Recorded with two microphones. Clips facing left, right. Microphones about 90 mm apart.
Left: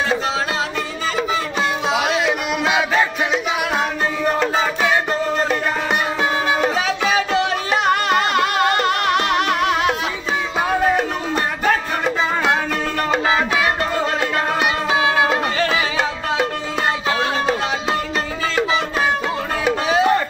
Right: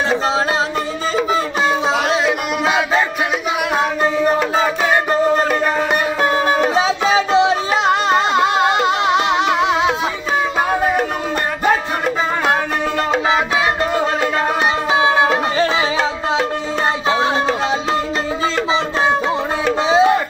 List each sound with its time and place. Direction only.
1.9 s music: centre (ahead or behind)
6.7 s music: 25° right (ahead or behind)
14.9 s music: 25° right (ahead or behind)
19.9 s music: 20° right (ahead or behind)